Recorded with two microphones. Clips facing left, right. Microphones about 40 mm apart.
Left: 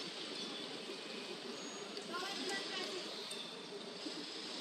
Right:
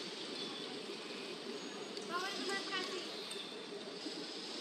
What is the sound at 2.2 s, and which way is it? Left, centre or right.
Vehicle, centre.